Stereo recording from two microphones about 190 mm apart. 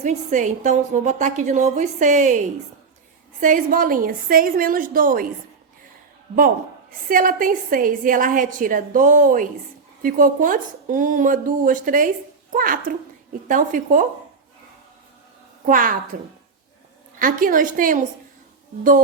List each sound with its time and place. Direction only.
0.0 s a woman's voice: 40° right (ahead or behind)
3.4 s speech: 45° right (ahead or behind)
7.1 s speech: 45° right (ahead or behind)
15.6 s speech: 45° right (ahead or behind)
17.2 s speech: 45° right (ahead or behind)